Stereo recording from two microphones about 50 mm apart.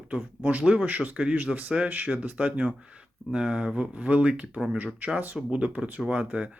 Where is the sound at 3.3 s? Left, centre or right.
Centre.